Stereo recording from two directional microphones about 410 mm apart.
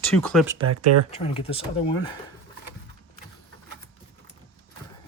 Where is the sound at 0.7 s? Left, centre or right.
Right.